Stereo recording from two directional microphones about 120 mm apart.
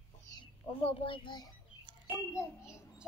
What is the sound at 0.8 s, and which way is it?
Speech, 50° left (ahead or behind).